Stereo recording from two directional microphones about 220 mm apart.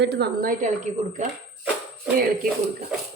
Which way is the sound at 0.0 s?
50° right (ahead or behind).